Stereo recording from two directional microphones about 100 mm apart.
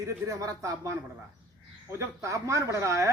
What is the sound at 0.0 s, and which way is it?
Speech, 35° right (ahead or behind).